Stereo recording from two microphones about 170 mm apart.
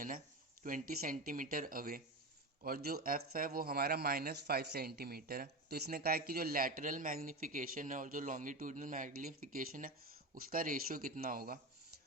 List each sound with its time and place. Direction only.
0.6 s speech: 55° right (ahead or behind)